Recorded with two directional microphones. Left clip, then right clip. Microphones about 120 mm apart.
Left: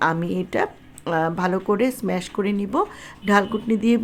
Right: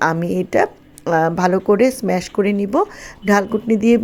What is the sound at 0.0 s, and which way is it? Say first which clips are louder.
Speech: right 4 dB; 30° right (ahead or behind).